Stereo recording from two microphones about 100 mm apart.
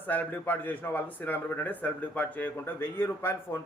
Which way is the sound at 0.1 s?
20° left (ahead or behind).